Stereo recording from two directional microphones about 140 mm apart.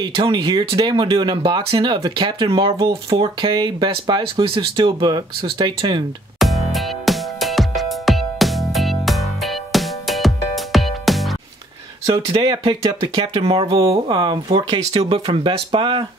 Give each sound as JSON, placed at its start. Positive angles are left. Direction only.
{"t": 0.0, "sound": "speech", "side_deg": -35}
{"t": 6.4, "sound": "music", "side_deg": 0}
{"t": 12.6, "sound": "speech", "side_deg": -35}
{"t": 13.7, "sound": "speech", "side_deg": -30}